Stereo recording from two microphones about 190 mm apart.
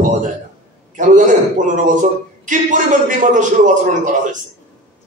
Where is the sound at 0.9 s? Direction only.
40° right (ahead or behind).